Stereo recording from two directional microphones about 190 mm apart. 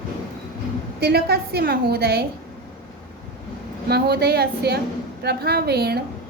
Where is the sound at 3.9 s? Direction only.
55° right (ahead or behind).